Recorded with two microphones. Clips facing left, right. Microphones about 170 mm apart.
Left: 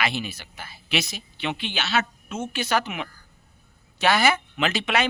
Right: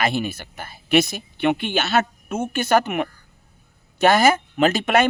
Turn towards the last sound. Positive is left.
turn(degrees=-50)  # may be behind; listen again after turning